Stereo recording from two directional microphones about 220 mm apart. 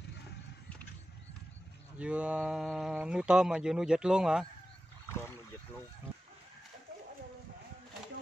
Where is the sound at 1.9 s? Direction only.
5° right (ahead or behind).